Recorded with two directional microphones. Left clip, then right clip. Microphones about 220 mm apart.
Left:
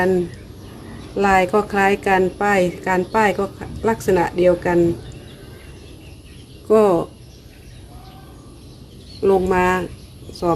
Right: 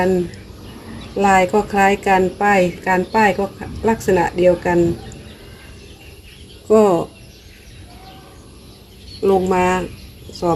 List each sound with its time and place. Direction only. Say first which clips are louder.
1.1 s a woman's voice: right 2 dB; centre (ahead or behind)
6.7 s speech: right 1 dB; centre (ahead or behind)
9.2 s a woman's voice: right 1 dB; centre (ahead or behind)